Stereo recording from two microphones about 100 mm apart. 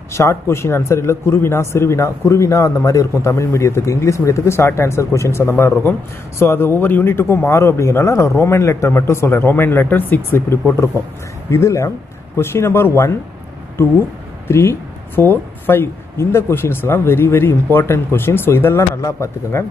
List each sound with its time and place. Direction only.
0.1 s speech: 25° left (ahead or behind)